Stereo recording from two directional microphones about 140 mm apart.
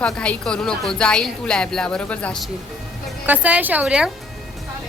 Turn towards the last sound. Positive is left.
turn(degrees=-5)  # may be behind; listen again after turning